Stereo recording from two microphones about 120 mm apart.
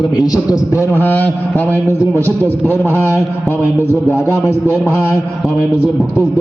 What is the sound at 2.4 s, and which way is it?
A man's voice, 20° left (ahead or behind).